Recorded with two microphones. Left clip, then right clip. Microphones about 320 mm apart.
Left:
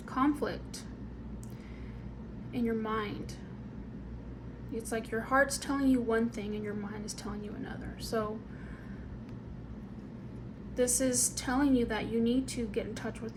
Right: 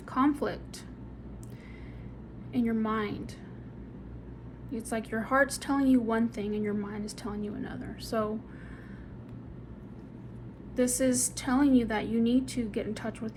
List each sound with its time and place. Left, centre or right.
0.1 s a sound: right
2.6 s a woman's voice: right
4.9 s a woman's voice: right
10.8 s a woman's voice: right